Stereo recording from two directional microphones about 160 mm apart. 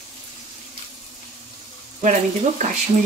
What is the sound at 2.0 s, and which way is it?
Speech, 50° right (ahead or behind).